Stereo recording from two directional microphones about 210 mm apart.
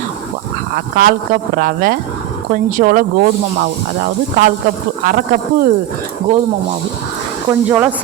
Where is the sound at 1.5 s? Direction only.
40° right (ahead or behind).